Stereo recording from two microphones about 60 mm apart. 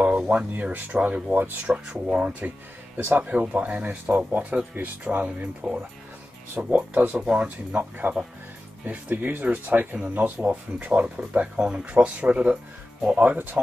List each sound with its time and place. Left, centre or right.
0.0 s speech: centre
6.9 s speech: right
7.2 s speech: centre